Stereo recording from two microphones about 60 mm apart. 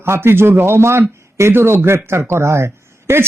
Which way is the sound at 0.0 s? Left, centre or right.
Right.